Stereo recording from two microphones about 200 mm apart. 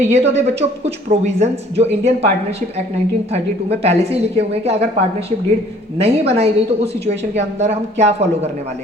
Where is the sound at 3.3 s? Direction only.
30° right (ahead or behind).